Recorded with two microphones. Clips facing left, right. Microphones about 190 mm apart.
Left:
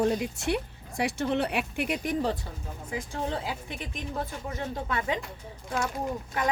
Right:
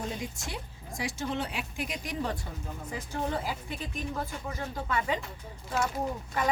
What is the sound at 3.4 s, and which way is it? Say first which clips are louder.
A woman's voice: even; 20° left (ahead or behind).